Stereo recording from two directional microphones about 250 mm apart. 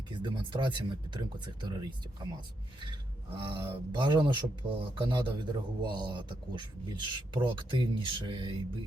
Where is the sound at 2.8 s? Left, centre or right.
Centre.